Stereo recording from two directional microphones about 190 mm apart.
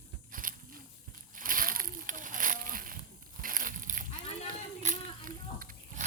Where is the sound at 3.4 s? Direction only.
45° right (ahead or behind).